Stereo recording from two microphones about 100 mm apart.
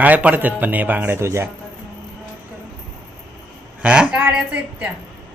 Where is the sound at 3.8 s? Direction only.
10° right (ahead or behind).